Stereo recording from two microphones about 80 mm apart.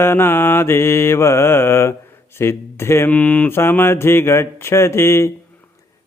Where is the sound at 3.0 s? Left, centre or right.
Centre.